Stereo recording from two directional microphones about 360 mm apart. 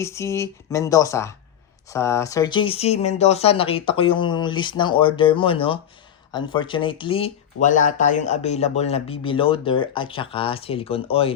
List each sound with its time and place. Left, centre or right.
0.0 s speech: centre